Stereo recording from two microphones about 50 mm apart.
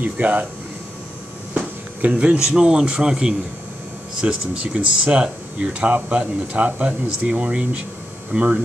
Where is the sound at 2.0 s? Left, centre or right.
Right.